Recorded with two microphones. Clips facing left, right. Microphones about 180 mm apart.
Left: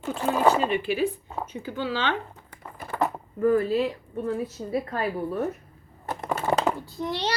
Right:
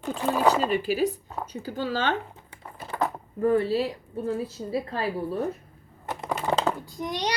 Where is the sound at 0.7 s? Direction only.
40° right (ahead or behind).